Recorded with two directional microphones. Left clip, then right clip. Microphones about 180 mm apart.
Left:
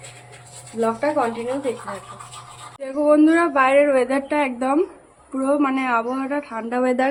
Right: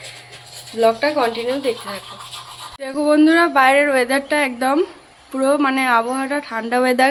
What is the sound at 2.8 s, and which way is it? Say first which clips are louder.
Speech: right 1 dB; centre (ahead or behind).